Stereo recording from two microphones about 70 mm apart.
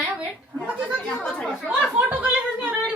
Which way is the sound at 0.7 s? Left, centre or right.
Centre.